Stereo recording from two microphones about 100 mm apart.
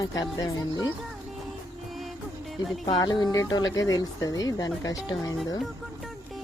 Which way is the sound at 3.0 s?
45° left (ahead or behind).